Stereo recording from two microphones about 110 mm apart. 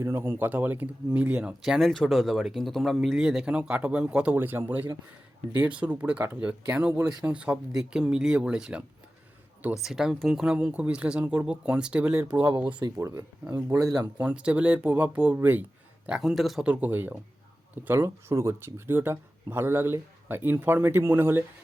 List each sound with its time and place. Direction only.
0.0 s speech: 25° right (ahead or behind); by 8.8 s 5° right (ahead or behind)
9.8 s speech: 5° right (ahead or behind)
13.0 s speech: 25° right (ahead or behind)
14.2 s speech: 10° right (ahead or behind)
16.0 s speech: 5° right (ahead or behind)